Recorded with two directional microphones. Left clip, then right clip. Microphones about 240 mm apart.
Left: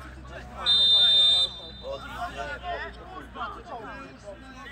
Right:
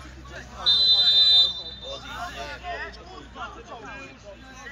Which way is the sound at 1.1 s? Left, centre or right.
Left.